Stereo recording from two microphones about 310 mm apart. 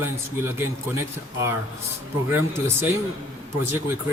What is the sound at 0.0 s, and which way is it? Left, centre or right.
Speech, centre.